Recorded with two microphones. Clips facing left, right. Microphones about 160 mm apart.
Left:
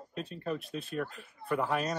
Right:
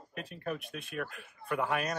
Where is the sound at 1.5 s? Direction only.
5° right (ahead or behind).